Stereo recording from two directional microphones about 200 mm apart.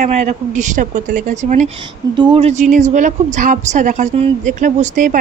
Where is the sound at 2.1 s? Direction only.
25° right (ahead or behind).